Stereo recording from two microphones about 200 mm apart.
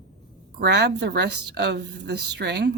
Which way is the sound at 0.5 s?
55° right (ahead or behind).